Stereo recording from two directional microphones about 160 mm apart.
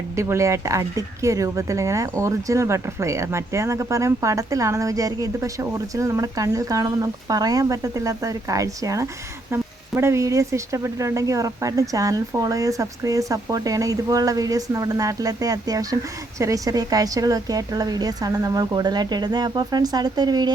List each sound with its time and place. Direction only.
0.2 s speech: 20° right (ahead or behind)